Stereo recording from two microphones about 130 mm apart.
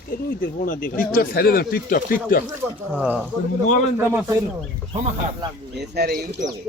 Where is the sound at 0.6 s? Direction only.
90° left.